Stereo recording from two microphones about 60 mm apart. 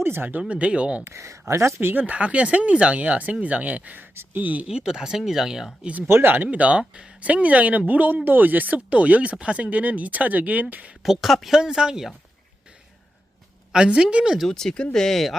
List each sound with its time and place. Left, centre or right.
0.0 s speech: right
0.4 s speech: centre
1.0 s speech: right
1.8 s speech: right
2.0 s speech: right
4.6 s speech: centre
5.8 s speech: centre
6.1 s speech: right
11.0 s speech: centre
13.7 s speech: centre
14.3 s speech: centre